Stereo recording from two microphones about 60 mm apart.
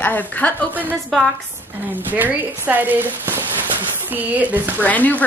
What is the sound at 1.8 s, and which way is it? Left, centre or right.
Speech, right.